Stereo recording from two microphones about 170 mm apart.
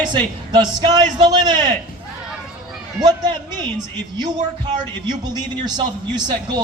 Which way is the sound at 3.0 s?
25° right (ahead or behind).